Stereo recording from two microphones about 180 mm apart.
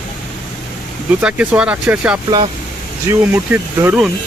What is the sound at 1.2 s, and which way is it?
Speech, 5° right (ahead or behind).